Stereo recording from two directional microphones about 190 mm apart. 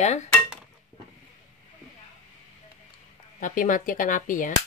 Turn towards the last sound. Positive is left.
turn(degrees=45)  # may be behind; listen again after turning